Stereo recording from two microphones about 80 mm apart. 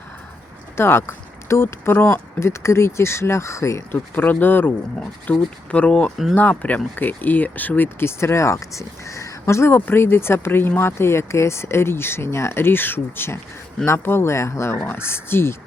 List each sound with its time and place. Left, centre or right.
0.8 s speech: left
2.4 s speech: left
3.9 s speech: left
4.9 s speech: centre; by 15.5 s left